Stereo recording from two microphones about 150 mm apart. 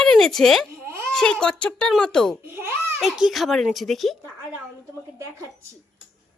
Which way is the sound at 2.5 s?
15° right (ahead or behind).